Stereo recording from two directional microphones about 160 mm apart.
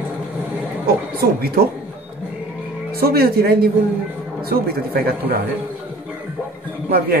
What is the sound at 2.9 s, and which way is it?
Speech, 75° right (ahead or behind).